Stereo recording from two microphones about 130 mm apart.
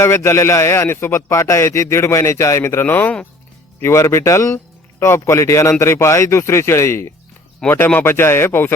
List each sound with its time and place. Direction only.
0.0 s speech: 20° left (ahead or behind)